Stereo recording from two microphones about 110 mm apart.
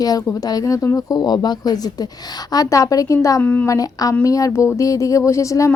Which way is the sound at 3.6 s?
35° left (ahead or behind).